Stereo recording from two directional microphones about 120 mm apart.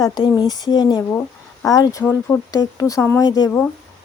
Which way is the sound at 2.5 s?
30° left (ahead or behind).